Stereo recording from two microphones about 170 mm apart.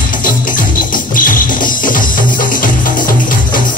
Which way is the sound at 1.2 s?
55° left (ahead or behind).